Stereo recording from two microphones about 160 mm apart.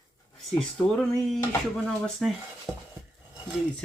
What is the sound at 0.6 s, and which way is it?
Speech, 5° left (ahead or behind).